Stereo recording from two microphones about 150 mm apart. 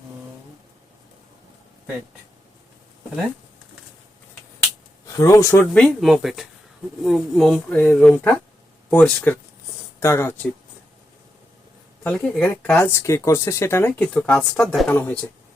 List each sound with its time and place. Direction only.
5.0 s speech: 20° left (ahead or behind)
5.7 s speech: 5° left (ahead or behind)
12.0 s speech: 10° left (ahead or behind)